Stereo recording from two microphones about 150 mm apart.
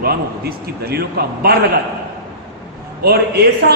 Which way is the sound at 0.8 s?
90° right.